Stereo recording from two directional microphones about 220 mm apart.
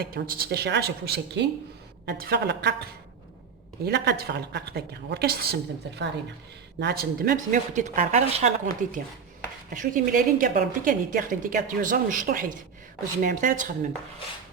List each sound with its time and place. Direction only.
0.0 s a woman's voice: 45° right (ahead or behind)